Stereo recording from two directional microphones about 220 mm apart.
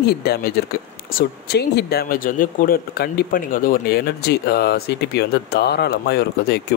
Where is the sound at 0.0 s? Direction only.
45° left (ahead or behind).